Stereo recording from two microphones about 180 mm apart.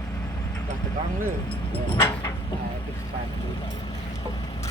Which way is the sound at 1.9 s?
25° left (ahead or behind).